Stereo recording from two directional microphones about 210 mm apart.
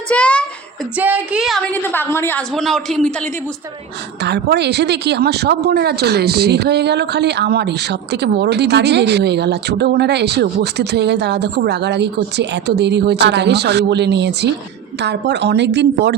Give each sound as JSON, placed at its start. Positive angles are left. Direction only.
{"t": 0.1, "sound": "a sound", "side_deg": 5}
{"t": 0.9, "sound": "a woman's voice", "side_deg": -5}
{"t": 4.2, "sound": "speech", "side_deg": -55}